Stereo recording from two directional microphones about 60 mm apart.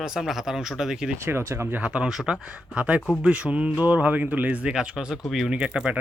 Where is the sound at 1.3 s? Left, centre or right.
Right.